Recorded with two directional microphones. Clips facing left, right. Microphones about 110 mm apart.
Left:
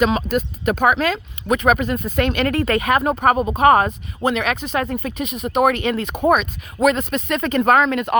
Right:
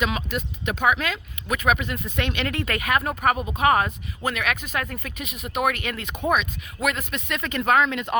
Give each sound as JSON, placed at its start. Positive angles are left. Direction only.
{"t": 0.0, "sound": "speech", "side_deg": 45}
{"t": 4.2, "sound": "speech", "side_deg": 25}